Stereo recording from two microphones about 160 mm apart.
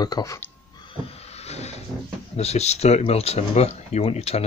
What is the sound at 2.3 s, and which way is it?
Speech, 40° left (ahead or behind).